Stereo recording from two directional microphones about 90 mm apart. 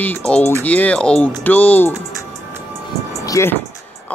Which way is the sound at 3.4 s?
35° left (ahead or behind).